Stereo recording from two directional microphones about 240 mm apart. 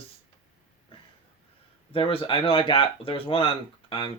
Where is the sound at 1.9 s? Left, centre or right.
Left.